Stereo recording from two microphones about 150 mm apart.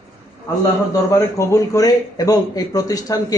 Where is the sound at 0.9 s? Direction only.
20° left (ahead or behind).